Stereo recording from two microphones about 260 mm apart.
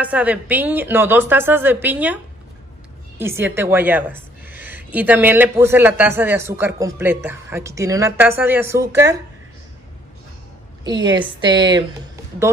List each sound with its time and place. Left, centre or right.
0.0 s a woman's voice: centre
3.2 s a woman's voice: centre
11.1 s a woman's voice: centre